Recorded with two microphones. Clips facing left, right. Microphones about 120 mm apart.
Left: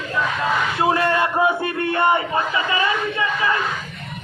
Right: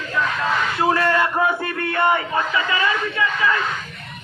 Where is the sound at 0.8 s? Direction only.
25° left (ahead or behind).